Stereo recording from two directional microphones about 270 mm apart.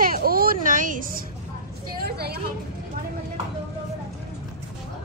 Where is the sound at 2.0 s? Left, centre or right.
Right.